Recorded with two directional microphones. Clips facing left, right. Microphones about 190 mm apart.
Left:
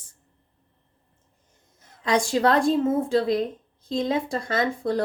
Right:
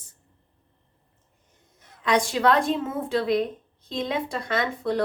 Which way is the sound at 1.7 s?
30° left (ahead or behind).